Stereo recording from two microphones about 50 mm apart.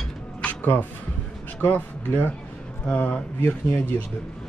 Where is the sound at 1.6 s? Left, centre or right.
Left.